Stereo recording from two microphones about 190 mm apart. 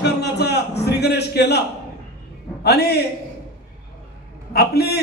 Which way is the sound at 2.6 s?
60° left (ahead or behind).